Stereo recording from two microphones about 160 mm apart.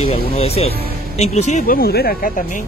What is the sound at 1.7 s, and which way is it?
Speech, 75° left (ahead or behind).